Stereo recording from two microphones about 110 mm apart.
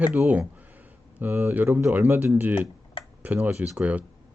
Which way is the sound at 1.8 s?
5° right (ahead or behind).